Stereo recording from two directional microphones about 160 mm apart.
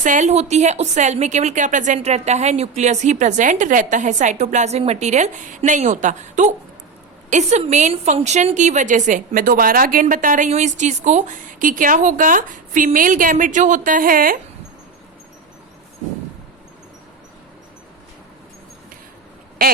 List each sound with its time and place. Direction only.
0.0 s a woman's voice: 50° right (ahead or behind)